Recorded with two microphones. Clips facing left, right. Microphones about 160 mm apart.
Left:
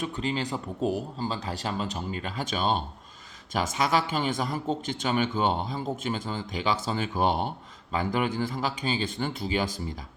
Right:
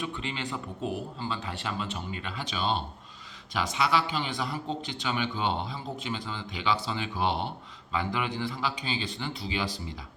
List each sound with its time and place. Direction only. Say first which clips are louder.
0.0 s speech: left 5 dB; 40° left (ahead or behind)